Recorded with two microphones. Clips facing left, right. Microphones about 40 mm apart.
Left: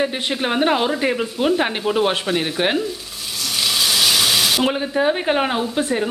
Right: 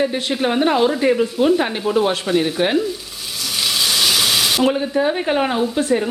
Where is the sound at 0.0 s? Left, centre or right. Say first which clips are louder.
Right 2 dB; centre.